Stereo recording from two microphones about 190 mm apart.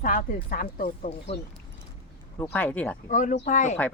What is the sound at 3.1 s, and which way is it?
Speech, 45° left (ahead or behind).